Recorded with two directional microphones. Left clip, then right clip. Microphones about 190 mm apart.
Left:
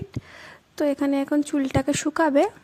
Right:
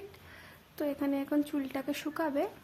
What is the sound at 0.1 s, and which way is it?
A woman's voice, 40° left (ahead or behind).